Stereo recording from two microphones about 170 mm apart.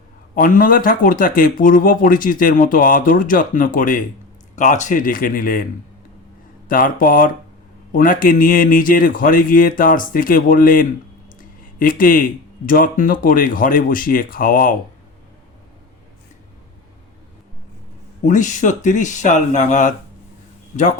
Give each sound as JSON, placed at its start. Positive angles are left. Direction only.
{"t": 0.3, "sound": "speech", "side_deg": 55}
{"t": 6.7, "sound": "speech", "side_deg": 55}
{"t": 18.3, "sound": "speech", "side_deg": 45}